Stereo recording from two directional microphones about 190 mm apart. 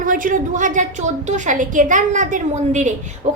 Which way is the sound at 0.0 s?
45° right (ahead or behind).